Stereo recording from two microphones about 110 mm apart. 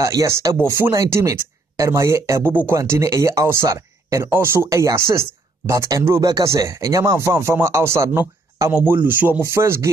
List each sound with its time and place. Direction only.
0.0 s speech: 30° right (ahead or behind)